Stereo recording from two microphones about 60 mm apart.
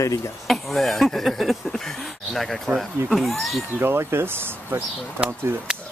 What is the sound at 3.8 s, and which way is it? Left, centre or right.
Speech, right.